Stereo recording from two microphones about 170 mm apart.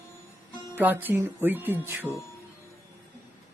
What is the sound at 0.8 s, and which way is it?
Speech, 10° right (ahead or behind).